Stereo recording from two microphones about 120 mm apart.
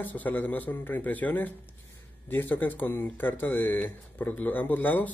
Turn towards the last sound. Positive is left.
turn(degrees=15)  # may be behind; listen again after turning